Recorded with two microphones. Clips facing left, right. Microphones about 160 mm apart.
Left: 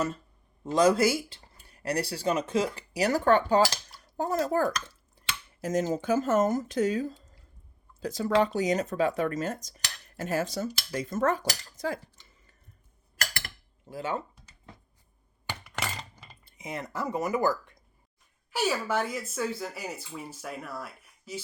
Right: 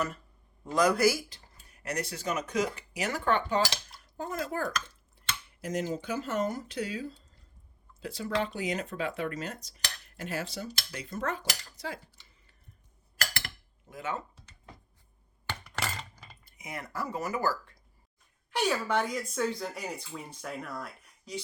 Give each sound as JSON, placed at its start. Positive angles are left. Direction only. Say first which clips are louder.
{"t": 0.6, "sound": "speech", "louder": "left 2 dB", "side_deg": 25}
{"t": 13.9, "sound": "speech", "louder": "left 4 dB", "side_deg": 30}
{"t": 15.4, "sound": "a sound", "louder": "left 1 dB", "side_deg": 5}
{"t": 16.5, "sound": "speech", "louder": "left 4 dB", "side_deg": 25}
{"t": 18.5, "sound": "speech", "louder": "even", "side_deg": 5}